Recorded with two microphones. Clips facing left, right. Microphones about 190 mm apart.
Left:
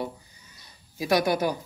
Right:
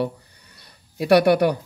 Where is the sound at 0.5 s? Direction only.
65° right (ahead or behind).